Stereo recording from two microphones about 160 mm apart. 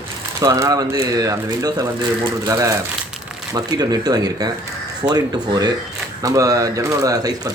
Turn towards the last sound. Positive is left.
turn(degrees=-25)  # may be behind; listen again after turning